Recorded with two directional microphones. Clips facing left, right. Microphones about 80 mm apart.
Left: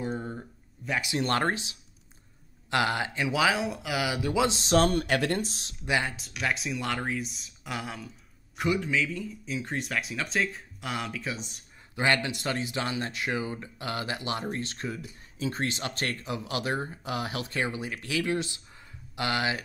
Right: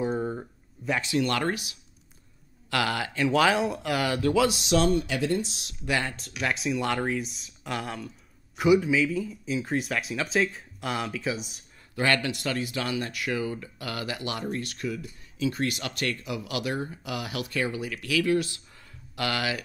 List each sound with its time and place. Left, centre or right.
0.0 s a sound: centre
1.1 s speech: left
3.3 s speech: centre
4.4 s chopping: left
5.5 s speech: left
5.9 s speech: centre
6.1 s speech: centre
11.9 s speech: left